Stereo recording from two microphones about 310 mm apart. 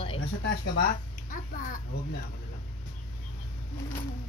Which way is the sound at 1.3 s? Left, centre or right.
Left.